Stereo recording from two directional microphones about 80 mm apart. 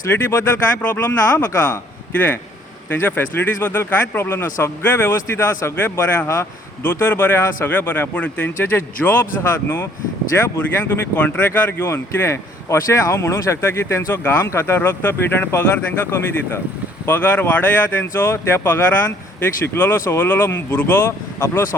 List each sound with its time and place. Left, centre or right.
0.1 s speech: left
6.2 s speech: left
6.8 s speech: left